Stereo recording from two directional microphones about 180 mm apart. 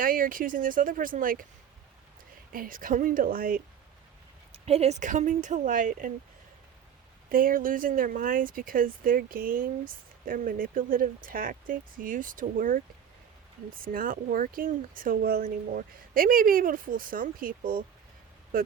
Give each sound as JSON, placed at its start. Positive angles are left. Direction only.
{"t": 0.0, "sound": "speech", "side_deg": -50}
{"t": 2.5, "sound": "speech", "side_deg": -50}
{"t": 4.5, "sound": "speech", "side_deg": -35}
{"t": 7.3, "sound": "speech", "side_deg": -50}